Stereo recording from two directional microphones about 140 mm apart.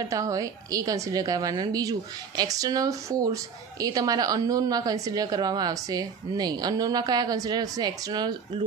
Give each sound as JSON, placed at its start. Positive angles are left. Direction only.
{"t": 0.1, "sound": "speech", "side_deg": -25}